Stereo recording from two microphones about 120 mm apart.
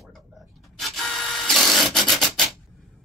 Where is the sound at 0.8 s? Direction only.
Centre (ahead or behind).